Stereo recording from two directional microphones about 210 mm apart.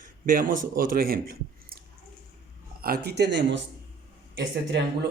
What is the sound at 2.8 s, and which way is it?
Speech, 50° right (ahead or behind).